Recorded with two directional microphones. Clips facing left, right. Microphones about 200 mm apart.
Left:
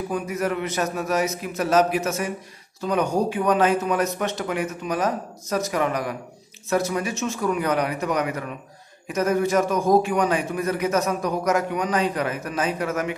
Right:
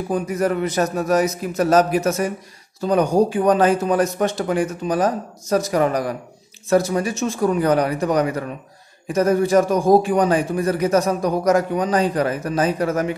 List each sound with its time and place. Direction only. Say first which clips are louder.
0.1 s a man's voice: right 6 dB; 40° right (ahead or behind)